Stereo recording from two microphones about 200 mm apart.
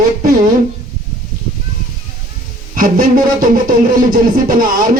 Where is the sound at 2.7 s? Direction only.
45° right (ahead or behind).